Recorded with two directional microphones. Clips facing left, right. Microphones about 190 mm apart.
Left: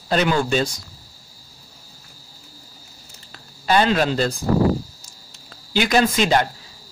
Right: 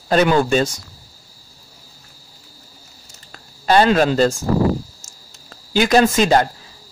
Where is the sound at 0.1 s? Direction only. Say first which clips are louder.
Right 4 dB; 50° right (ahead or behind).